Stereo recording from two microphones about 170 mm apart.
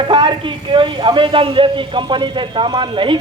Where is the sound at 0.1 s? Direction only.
30° right (ahead or behind).